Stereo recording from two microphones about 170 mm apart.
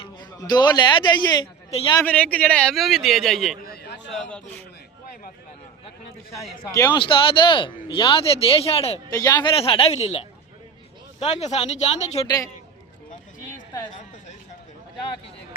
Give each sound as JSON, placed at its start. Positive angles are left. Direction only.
{"t": 0.0, "sound": "a man's voice", "side_deg": 25}
{"t": 2.0, "sound": "a man's voice", "side_deg": 10}
{"t": 3.6, "sound": "a sound", "side_deg": 65}
{"t": 4.1, "sound": "a man's voice", "side_deg": 5}
{"t": 6.3, "sound": "a man's voice", "side_deg": 20}
{"t": 9.0, "sound": "a woman's voice", "side_deg": 20}